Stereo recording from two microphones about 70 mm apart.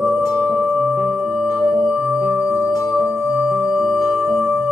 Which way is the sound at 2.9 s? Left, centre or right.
Centre.